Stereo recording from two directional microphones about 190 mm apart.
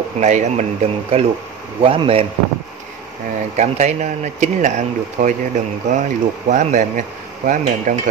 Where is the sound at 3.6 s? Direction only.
40° right (ahead or behind).